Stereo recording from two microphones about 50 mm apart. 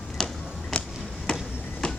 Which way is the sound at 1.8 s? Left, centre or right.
Centre.